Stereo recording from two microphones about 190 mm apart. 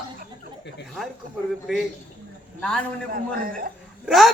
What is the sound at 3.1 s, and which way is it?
Speech, 50° right (ahead or behind).